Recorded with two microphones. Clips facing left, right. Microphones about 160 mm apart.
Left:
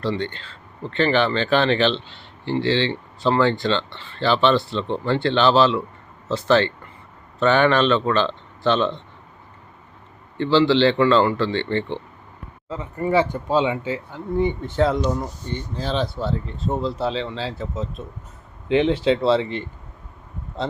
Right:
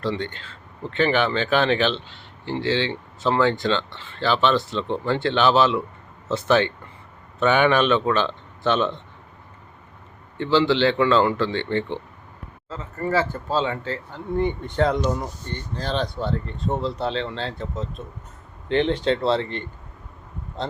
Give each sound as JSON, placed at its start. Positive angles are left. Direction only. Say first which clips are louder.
{"t": 0.2, "sound": "speech", "louder": "left 3 dB", "side_deg": 0}
{"t": 7.3, "sound": "speech", "louder": "left 1 dB", "side_deg": -10}
{"t": 10.3, "sound": "speech", "louder": "left 2 dB", "side_deg": -10}
{"t": 12.6, "sound": "speech", "louder": "left 3 dB", "side_deg": 15}
{"t": 15.4, "sound": "speech", "louder": "left 1 dB", "side_deg": 10}